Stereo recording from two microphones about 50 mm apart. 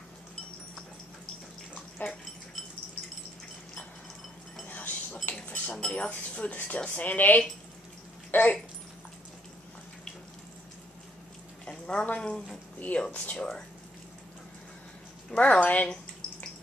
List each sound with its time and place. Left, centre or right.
2.0 s a sound: left
4.6 s a sound: left
5.7 s a woman's voice: left
11.6 s speech: centre
12.7 s speech: left
15.3 s speech: left